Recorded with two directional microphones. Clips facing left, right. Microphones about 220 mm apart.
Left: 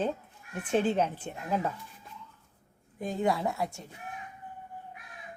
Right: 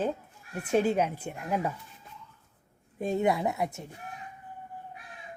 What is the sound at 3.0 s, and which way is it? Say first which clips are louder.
Speech: right 2 dB; 25° right (ahead or behind).